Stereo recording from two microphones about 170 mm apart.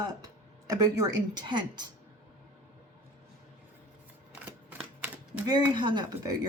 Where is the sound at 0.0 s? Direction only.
25° right (ahead or behind).